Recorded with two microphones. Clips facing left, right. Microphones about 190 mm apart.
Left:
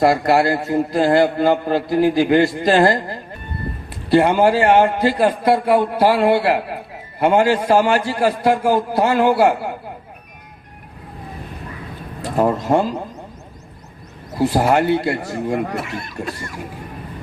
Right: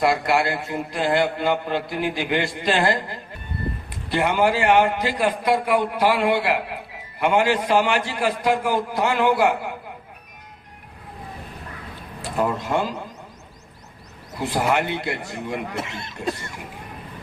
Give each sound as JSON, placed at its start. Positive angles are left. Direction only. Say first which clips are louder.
{"t": 0.0, "sound": "a man's voice", "louder": "left 5 dB", "side_deg": 45}
{"t": 4.1, "sound": "a man's voice", "louder": "left 6 dB", "side_deg": 40}
{"t": 12.2, "sound": "speech", "louder": "left 6 dB", "side_deg": 40}
{"t": 14.3, "sound": "a man's voice", "louder": "left 6 dB", "side_deg": 40}
{"t": 15.7, "sound": "speech", "louder": "left 5 dB", "side_deg": -25}